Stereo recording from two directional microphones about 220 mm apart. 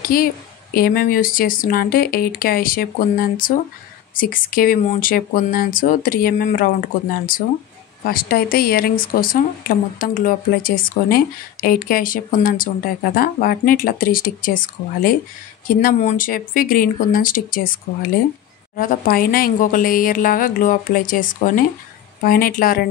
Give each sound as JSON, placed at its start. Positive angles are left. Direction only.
{"t": 0.0, "sound": "a woman's voice", "side_deg": 40}
{"t": 18.8, "sound": "speech", "side_deg": 40}